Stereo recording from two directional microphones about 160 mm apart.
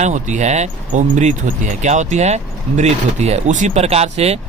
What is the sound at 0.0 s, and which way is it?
Speech, 50° right (ahead or behind).